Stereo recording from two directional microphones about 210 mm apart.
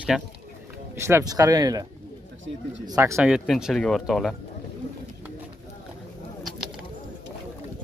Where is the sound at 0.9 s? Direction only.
10° right (ahead or behind).